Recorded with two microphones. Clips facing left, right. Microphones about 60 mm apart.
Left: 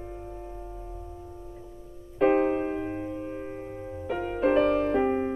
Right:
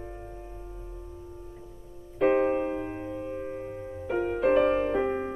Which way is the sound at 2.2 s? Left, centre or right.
Centre.